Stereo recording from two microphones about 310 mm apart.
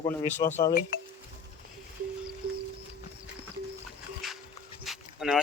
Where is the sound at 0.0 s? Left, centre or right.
Centre.